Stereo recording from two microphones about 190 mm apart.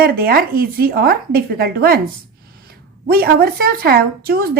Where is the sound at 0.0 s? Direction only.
50° right (ahead or behind).